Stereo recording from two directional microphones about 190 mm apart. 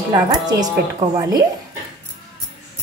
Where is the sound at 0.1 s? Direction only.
20° right (ahead or behind).